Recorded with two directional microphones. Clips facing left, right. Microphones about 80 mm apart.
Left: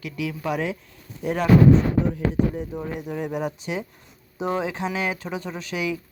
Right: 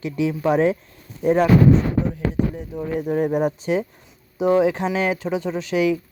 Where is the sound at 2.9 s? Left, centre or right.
Right.